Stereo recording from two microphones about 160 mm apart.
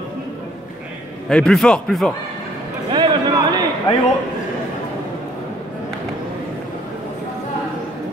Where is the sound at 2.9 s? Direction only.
25° right (ahead or behind).